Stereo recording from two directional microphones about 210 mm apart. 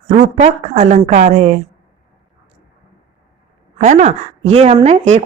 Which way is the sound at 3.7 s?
35° right (ahead or behind).